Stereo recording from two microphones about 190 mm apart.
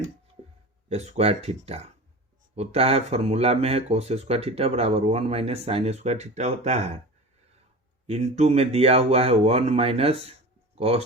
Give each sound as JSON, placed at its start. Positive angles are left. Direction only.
{"t": 0.4, "sound": "a sound", "side_deg": -35}
{"t": 0.9, "sound": "speech", "side_deg": -35}
{"t": 8.0, "sound": "speech", "side_deg": -35}